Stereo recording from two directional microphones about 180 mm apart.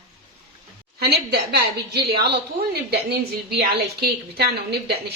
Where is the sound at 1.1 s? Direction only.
65° right (ahead or behind).